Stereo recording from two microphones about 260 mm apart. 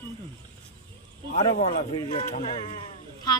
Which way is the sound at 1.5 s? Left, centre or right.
Left.